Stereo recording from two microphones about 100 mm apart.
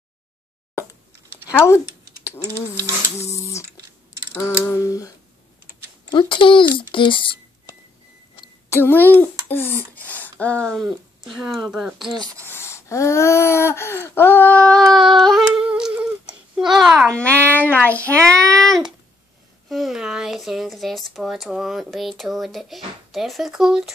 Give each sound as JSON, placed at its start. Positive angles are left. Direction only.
{"t": 3.2, "sound": "speech", "side_deg": 30}
{"t": 4.3, "sound": "speech", "side_deg": 20}
{"t": 4.7, "sound": "humming", "side_deg": 35}
{"t": 6.0, "sound": "speech", "side_deg": 55}
{"t": 8.6, "sound": "a child's voice", "side_deg": 25}
{"t": 12.5, "sound": "a sound", "side_deg": 25}
{"t": 17.1, "sound": "a child's voice", "side_deg": 15}